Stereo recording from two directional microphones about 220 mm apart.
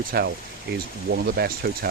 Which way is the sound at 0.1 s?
45° right (ahead or behind).